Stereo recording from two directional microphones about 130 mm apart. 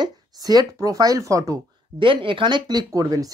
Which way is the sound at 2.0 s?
40° right (ahead or behind).